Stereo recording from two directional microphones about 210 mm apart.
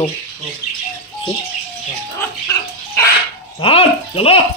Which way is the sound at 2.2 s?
15° left (ahead or behind).